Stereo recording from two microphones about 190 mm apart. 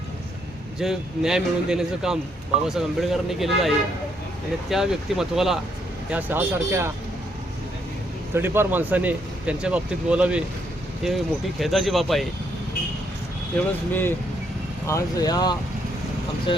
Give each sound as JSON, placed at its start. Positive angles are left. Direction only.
{"t": 0.8, "sound": "speech", "side_deg": 0}
{"t": 8.4, "sound": "speech", "side_deg": -10}
{"t": 13.5, "sound": "speech", "side_deg": 10}
{"t": 14.8, "sound": "speech", "side_deg": 20}